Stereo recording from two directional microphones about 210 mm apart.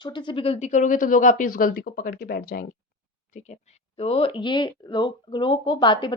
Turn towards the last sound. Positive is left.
turn(degrees=20)  # may be behind; listen again after turning